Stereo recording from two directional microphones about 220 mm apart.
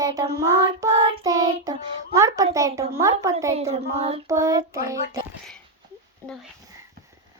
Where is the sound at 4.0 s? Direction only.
25° right (ahead or behind).